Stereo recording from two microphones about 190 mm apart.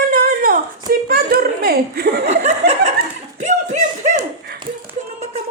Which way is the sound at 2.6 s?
55° right (ahead or behind).